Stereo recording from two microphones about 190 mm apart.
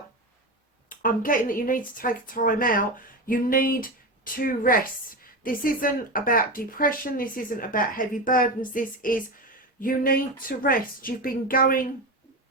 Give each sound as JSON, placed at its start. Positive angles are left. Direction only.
{"t": 0.9, "sound": "speech", "side_deg": 45}